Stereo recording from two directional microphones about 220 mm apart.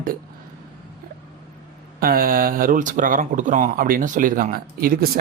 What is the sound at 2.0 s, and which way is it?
Speech, 40° right (ahead or behind).